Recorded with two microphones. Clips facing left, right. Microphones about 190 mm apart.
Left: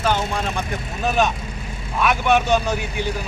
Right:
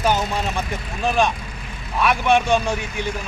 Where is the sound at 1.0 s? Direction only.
5° left (ahead or behind).